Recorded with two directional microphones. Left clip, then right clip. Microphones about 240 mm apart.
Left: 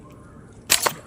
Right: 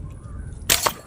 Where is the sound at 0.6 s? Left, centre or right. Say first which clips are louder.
Right 1 dB; centre.